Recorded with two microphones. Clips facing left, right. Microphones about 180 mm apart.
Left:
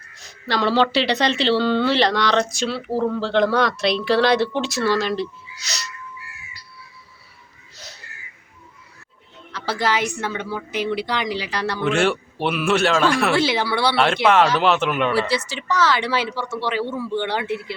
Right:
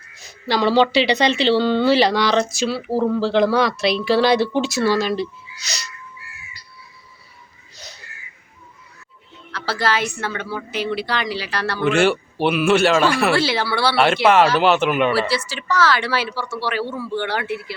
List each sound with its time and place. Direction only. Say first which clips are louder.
0.2 s speech: right 3 dB; centre (ahead or behind)
9.5 s a woman's voice: even; 15° left (ahead or behind)
11.8 s speech: right 3 dB; centre (ahead or behind)
13.3 s a woman's voice: even; 15° left (ahead or behind)
13.9 s speech: right 3 dB; 5° right (ahead or behind)
15.3 s speech: even; 20° left (ahead or behind)